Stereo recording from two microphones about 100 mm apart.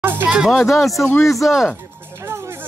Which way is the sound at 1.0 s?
25° left (ahead or behind).